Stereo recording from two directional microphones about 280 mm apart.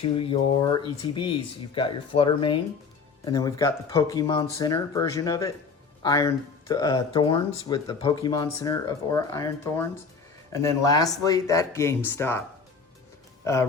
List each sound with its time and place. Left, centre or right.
0.0 s speech: centre
13.4 s speech: centre